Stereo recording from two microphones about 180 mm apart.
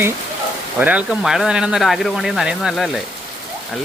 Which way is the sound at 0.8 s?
10° right (ahead or behind).